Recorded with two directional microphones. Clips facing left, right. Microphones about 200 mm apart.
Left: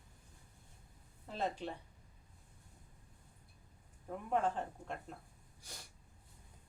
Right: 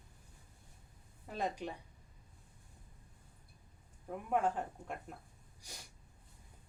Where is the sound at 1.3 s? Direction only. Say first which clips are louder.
Even; 15° right (ahead or behind).